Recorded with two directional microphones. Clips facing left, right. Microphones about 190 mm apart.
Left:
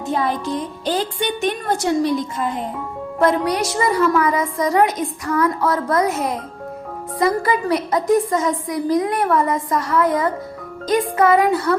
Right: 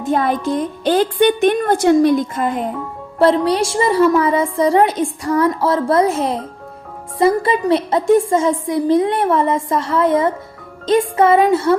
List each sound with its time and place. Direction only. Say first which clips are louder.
0.1 s a woman's voice: right 4 dB; 55° right (ahead or behind)
3.2 s a woman's voice: right 4 dB; 30° right (ahead or behind)